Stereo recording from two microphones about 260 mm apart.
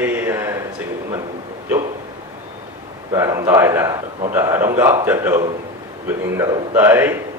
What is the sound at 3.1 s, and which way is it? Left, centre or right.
A man's voice, centre.